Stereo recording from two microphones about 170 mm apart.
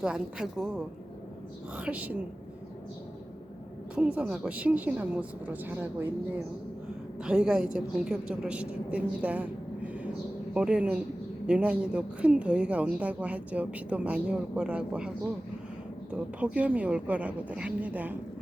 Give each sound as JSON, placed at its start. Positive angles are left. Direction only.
{"t": 0.0, "sound": "a woman's voice", "side_deg": -5}
{"t": 1.7, "sound": "speech", "side_deg": -10}
{"t": 3.9, "sound": "speech", "side_deg": -5}
{"t": 7.2, "sound": "speech", "side_deg": -5}